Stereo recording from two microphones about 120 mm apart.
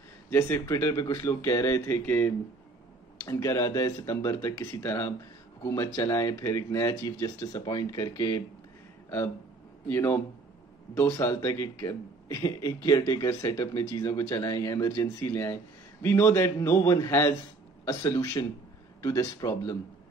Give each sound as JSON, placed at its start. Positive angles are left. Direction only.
{"t": 0.3, "sound": "a man's voice", "side_deg": 20}
{"t": 9.8, "sound": "a man's voice", "side_deg": 20}